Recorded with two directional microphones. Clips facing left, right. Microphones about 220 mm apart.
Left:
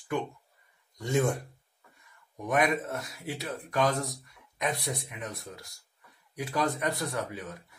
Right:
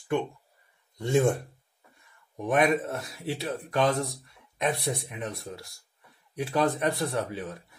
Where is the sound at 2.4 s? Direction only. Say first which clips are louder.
Right 3 dB; 30° right (ahead or behind).